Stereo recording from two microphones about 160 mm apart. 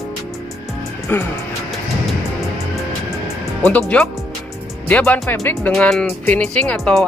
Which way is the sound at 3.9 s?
5° left (ahead or behind).